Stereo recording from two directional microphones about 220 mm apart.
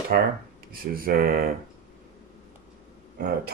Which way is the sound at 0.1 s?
45° right (ahead or behind).